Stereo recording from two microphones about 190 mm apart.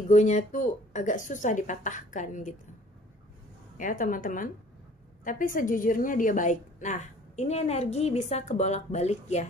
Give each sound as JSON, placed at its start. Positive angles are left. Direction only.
{"t": 0.1, "sound": "a woman's voice", "side_deg": 40}
{"t": 3.7, "sound": "a woman's voice", "side_deg": 45}